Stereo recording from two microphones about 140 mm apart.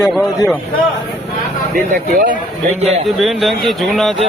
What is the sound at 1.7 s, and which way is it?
Speech, 80° right.